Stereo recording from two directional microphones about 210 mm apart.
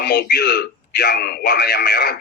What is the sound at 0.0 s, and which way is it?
Speech, 50° left (ahead or behind).